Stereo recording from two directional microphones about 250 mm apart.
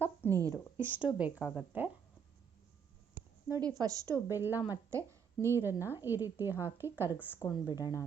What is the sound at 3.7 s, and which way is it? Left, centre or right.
A woman's voice, centre.